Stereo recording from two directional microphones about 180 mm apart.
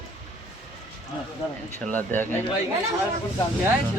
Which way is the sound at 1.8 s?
10° left (ahead or behind).